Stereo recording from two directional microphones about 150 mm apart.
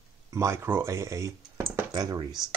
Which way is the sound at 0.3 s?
20° right (ahead or behind).